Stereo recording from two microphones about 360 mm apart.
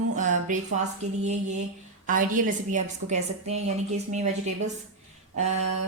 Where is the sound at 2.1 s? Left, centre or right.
Right.